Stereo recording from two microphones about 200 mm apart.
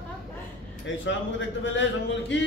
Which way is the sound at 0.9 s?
65° left (ahead or behind).